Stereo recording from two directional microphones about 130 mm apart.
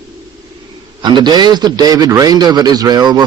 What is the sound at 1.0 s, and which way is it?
A man's voice, 35° right (ahead or behind).